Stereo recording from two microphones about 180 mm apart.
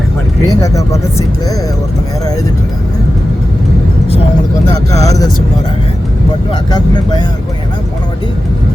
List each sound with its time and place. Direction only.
0.4 s speech: 20° left (ahead or behind)
4.9 s speech: 20° left (ahead or behind)
6.5 s speech: 20° left (ahead or behind)